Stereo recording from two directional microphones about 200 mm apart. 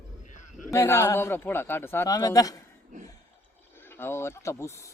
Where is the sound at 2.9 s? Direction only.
40° right (ahead or behind).